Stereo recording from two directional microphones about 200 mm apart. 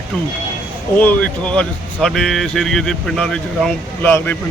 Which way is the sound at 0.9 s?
5° left (ahead or behind).